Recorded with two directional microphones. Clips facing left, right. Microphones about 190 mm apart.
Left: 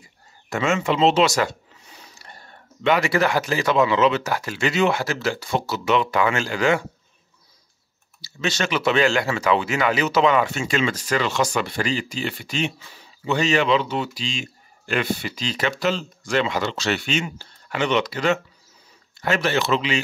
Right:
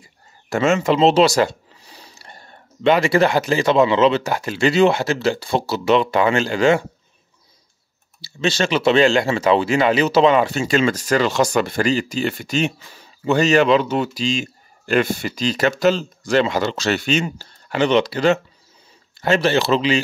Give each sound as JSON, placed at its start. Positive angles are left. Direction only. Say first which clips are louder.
{"t": 0.5, "sound": "speech", "louder": "right 5 dB", "side_deg": -40}
{"t": 8.2, "sound": "speech", "louder": "right 5 dB", "side_deg": -30}